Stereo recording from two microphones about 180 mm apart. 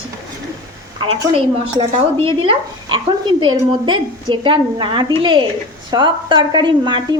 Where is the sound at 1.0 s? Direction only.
30° right (ahead or behind).